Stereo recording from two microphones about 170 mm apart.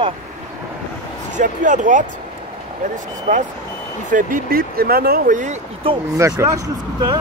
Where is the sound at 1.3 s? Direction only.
50° right (ahead or behind).